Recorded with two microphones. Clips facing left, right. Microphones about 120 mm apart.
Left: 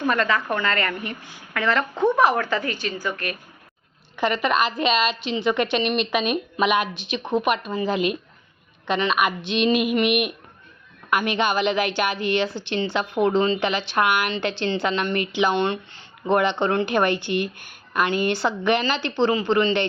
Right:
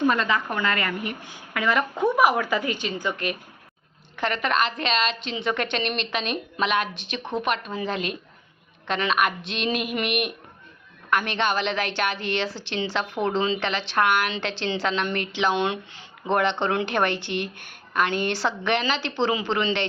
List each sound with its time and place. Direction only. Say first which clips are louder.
0.1 s a woman's voice: left 2 dB; 15° right (ahead or behind)
4.2 s a woman's voice: left 3 dB; 5° left (ahead or behind)
15.5 s a woman's voice: left 2 dB; 10° right (ahead or behind)
16.2 s a woman's voice: left 3 dB; centre (ahead or behind)